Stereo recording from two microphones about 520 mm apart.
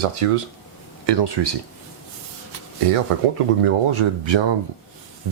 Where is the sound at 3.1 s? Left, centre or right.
Right.